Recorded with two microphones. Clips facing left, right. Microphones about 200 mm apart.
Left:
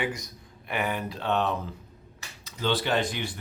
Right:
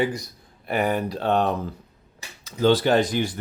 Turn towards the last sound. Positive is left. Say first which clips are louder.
# right 7 dB
turn(degrees=-40)  # may be behind; listen again after turning